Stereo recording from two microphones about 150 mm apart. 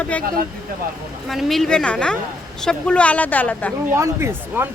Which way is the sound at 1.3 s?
Centre (ahead or behind).